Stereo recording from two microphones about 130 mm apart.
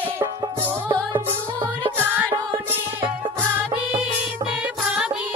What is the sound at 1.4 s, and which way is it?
Music, 40° right (ahead or behind).